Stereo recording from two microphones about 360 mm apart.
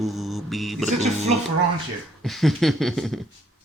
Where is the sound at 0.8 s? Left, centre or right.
Centre.